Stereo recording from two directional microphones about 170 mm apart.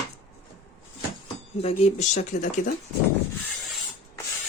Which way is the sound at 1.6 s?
45° left (ahead or behind).